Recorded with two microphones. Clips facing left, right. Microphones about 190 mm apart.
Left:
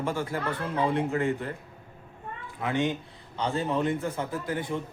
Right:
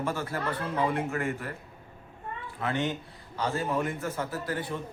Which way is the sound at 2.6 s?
15° left (ahead or behind).